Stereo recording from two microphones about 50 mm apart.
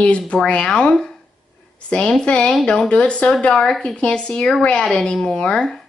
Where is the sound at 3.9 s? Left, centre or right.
Left.